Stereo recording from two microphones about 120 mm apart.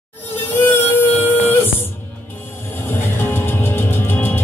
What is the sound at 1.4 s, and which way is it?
Music, 15° left (ahead or behind).